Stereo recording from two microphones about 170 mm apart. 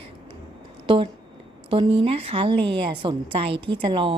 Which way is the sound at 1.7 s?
30° right (ahead or behind).